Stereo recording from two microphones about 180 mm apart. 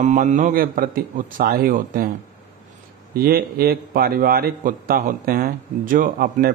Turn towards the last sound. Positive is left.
turn(degrees=-50)  # may be behind; listen again after turning